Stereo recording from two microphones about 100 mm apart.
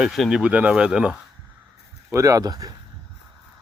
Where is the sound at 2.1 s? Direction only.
35° right (ahead or behind).